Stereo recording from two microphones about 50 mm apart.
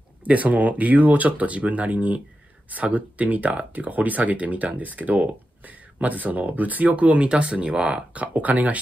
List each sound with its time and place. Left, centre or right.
0.2 s speech: right
8.1 s speech: right